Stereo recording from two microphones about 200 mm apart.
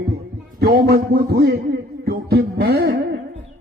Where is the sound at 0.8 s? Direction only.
50° right (ahead or behind).